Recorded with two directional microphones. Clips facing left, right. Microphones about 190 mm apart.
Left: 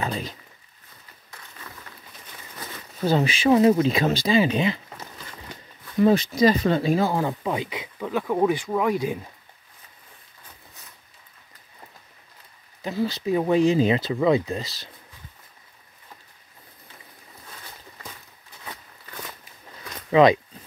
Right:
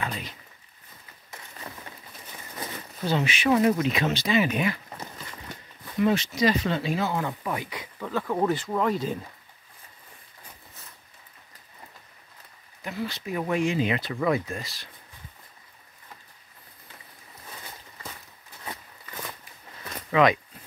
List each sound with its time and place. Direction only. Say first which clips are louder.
0.0 s a sound: left 5 dB; 35° left (ahead or behind)
3.1 s speech: left 4 dB; 35° left (ahead or behind)
5.9 s speech: left 5 dB; 35° left (ahead or behind); by 9.2 s 10° left (ahead or behind)
12.8 s speech: left 7 dB; 35° left (ahead or behind)
20.1 s speech: left 5 dB; 30° left (ahead or behind)